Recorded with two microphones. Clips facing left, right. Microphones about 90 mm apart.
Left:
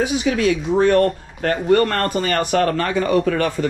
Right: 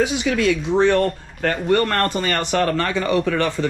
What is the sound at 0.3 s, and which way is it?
Speech, 40° left (ahead or behind).